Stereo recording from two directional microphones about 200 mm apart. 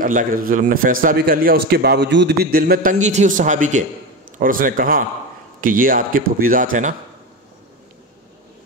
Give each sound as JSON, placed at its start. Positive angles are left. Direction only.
{"t": 0.0, "sound": "a man's voice", "side_deg": -40}